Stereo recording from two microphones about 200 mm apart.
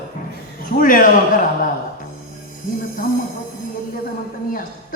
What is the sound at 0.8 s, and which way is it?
Speech, 45° left (ahead or behind).